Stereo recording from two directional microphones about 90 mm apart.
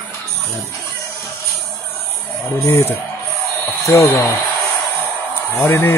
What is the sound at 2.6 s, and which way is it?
Speech, 30° left (ahead or behind).